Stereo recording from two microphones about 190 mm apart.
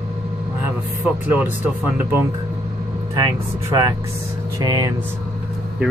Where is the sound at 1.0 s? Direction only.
10° right (ahead or behind).